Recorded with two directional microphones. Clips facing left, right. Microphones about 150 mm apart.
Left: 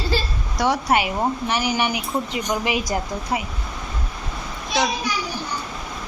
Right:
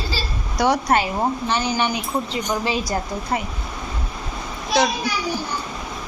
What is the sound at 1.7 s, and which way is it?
A woman's voice, 15° left (ahead or behind).